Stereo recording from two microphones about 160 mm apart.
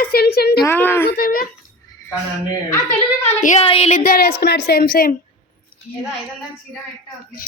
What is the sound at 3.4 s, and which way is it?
Speech, 50° left (ahead or behind).